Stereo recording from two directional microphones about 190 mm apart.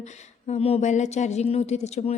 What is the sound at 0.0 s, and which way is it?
Speech, 35° left (ahead or behind).